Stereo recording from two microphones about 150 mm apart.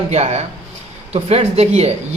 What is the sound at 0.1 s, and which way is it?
A man's voice, 45° right (ahead or behind).